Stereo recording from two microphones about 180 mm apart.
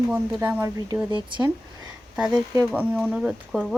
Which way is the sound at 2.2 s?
5° right (ahead or behind).